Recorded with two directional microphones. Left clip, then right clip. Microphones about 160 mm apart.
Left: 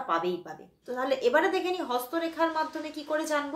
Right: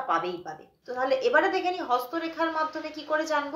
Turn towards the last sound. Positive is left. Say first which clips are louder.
# right 2 dB
turn(degrees=20)  # may be behind; listen again after turning